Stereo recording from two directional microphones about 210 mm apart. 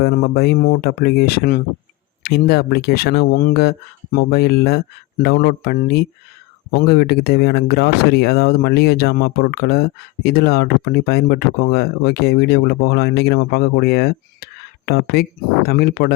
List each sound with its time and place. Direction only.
0.0 s speech: 50° left (ahead or behind)